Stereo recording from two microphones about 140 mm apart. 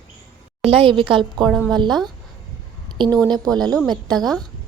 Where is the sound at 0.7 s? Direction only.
40° right (ahead or behind).